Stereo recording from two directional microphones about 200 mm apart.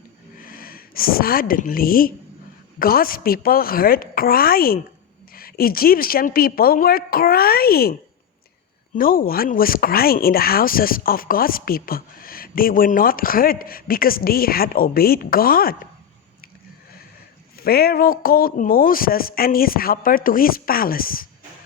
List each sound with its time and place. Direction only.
0.3 s speech: 45° left (ahead or behind)
9.0 s speech: 45° left (ahead or behind)
17.6 s speech: 50° left (ahead or behind)